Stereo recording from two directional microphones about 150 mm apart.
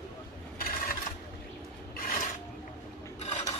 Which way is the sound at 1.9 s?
65° left (ahead or behind).